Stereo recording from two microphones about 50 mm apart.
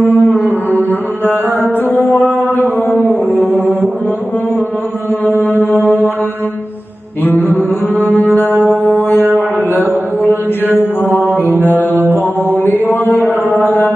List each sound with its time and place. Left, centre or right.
0.0 s music: left
1.9 s mantra: left
5.4 s music: left
7.2 s mantra: left
8.0 s music: left
8.6 s mantra: left
10.7 s mantra: right
11.6 s mantra: left